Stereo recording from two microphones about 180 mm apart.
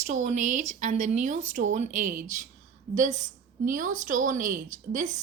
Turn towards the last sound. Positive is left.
turn(degrees=-45)  # may be behind; listen again after turning